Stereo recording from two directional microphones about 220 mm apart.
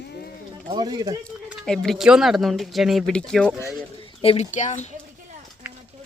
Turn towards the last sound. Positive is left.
turn(degrees=35)  # may be behind; listen again after turning